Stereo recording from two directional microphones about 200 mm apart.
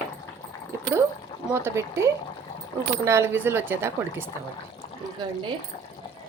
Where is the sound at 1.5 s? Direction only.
15° right (ahead or behind).